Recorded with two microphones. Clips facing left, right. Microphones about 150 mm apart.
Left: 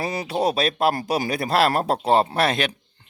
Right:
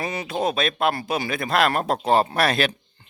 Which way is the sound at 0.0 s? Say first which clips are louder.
Left 2 dB; 35° left (ahead or behind).